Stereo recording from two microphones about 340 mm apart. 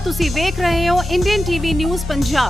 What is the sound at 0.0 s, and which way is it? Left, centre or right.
Speech, centre.